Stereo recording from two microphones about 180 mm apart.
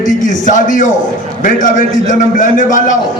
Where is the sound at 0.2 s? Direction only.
45° left (ahead or behind).